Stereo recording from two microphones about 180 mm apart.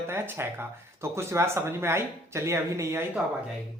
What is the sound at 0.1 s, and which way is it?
Speech, 15° right (ahead or behind).